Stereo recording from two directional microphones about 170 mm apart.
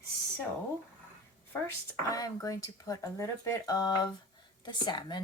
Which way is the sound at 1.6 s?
20° left (ahead or behind).